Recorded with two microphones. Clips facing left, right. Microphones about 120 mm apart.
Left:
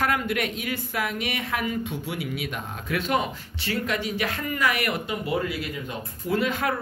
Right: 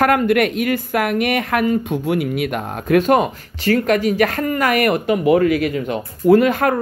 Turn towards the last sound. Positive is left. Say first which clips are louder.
# right 10 dB
turn(degrees=-45)  # may be behind; listen again after turning